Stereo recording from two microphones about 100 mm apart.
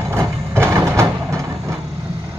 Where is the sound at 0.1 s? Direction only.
30° right (ahead or behind).